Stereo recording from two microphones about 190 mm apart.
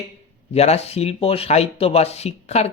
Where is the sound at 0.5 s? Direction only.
35° left (ahead or behind).